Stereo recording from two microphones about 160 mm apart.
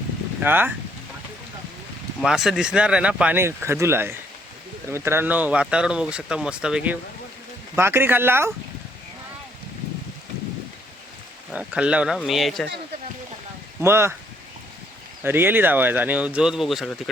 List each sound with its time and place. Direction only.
0.4 s speech: 10° right (ahead or behind)
2.2 s speech: 5° right (ahead or behind)
11.5 s speech: 5° right (ahead or behind)
13.8 s speech: 15° right (ahead or behind)
15.2 s speech: 15° right (ahead or behind)